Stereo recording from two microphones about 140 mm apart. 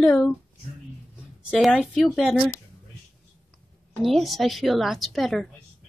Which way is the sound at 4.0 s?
Centre (ahead or behind).